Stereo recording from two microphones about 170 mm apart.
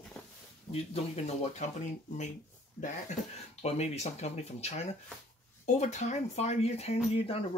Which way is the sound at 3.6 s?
40° left (ahead or behind).